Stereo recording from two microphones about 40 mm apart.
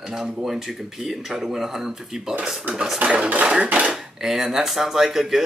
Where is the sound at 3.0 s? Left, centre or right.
Right.